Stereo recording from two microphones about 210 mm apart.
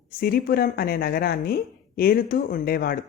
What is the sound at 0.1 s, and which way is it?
Speech, 45° left (ahead or behind).